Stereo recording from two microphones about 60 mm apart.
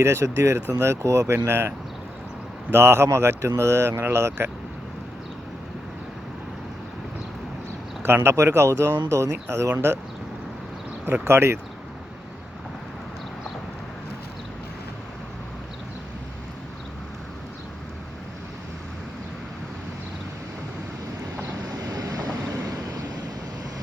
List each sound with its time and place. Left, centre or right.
0.0 s speech: right
1.5 s speech: right
8.0 s speech: right
11.3 s speech: right
21.8 s vehicle: right